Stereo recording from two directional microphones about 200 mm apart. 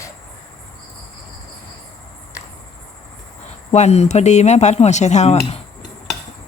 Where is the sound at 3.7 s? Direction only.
35° left (ahead or behind).